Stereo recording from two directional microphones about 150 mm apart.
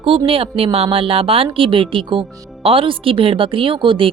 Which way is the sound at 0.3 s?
40° right (ahead or behind).